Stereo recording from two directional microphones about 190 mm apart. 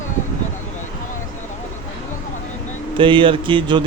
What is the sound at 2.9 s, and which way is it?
Speech, 25° right (ahead or behind).